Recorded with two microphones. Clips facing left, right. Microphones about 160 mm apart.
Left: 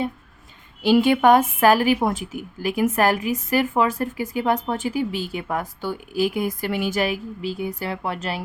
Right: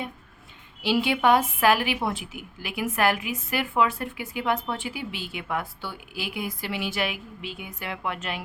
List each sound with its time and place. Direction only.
0.8 s a woman's voice: 45° left (ahead or behind)